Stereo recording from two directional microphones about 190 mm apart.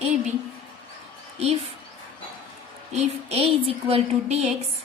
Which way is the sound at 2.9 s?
30° right (ahead or behind).